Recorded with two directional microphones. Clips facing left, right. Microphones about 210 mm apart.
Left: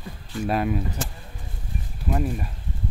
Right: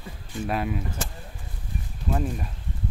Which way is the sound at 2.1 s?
5° left (ahead or behind).